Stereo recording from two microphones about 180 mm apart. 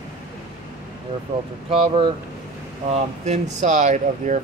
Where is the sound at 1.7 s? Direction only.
30° right (ahead or behind).